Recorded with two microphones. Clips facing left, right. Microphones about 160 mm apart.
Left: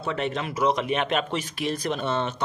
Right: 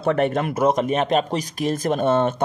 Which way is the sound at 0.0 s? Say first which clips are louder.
Right 8 dB; 55° right (ahead or behind).